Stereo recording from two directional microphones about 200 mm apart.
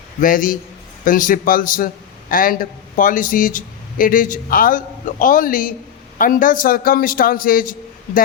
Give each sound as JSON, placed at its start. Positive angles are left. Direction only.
{"t": 0.2, "sound": "speech", "side_deg": 45}